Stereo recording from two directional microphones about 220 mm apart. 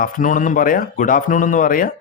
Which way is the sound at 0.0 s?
35° left (ahead or behind).